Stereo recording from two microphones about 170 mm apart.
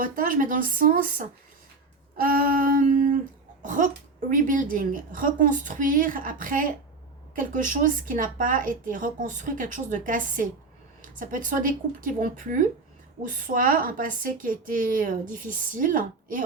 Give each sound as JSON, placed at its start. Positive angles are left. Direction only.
{"t": 0.0, "sound": "a woman's voice", "side_deg": -55}
{"t": 2.2, "sound": "a woman's voice", "side_deg": -55}
{"t": 3.6, "sound": "a sound", "side_deg": -50}
{"t": 4.3, "sound": "a woman's voice", "side_deg": -50}